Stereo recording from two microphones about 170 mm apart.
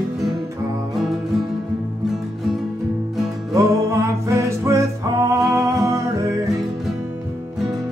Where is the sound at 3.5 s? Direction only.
15° right (ahead or behind).